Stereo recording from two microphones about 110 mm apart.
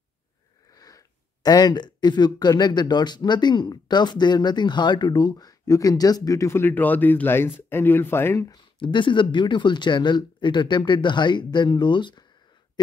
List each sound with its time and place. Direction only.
0.7 s speech: 35° left (ahead or behind)
8.7 s speech: 45° left (ahead or behind)